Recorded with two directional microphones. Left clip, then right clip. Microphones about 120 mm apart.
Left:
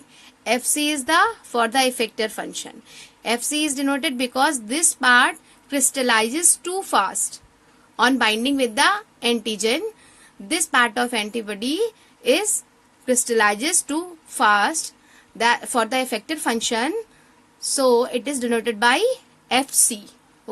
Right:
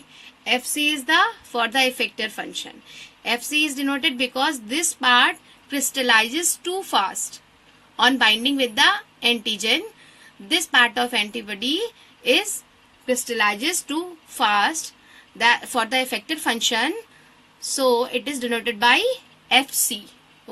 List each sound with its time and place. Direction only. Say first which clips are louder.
0.4 s a woman's voice: even; 70° left (ahead or behind)
1.0 s a woman's voice: left 2 dB; 50° left (ahead or behind)
13.1 s a woman's voice: left 3 dB; 65° left (ahead or behind)